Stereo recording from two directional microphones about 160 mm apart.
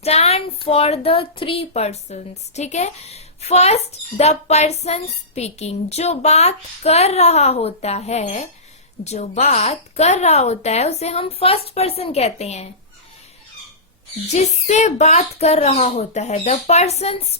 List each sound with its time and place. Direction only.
0.0 s speech: 40° left (ahead or behind)
14.3 s speech: 45° left (ahead or behind)